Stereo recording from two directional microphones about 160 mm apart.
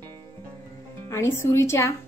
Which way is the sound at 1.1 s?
15° left (ahead or behind).